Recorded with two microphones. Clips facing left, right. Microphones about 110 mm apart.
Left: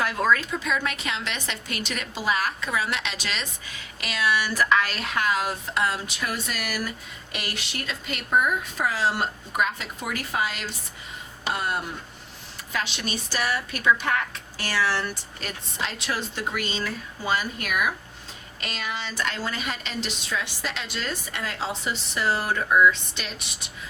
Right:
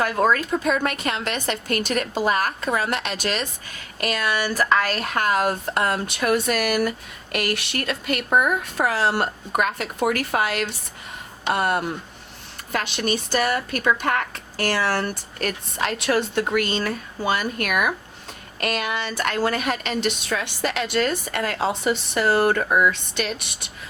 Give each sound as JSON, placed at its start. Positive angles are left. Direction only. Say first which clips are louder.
{"t": 0.0, "sound": "a woman's voice", "louder": "right 3 dB", "side_deg": -45}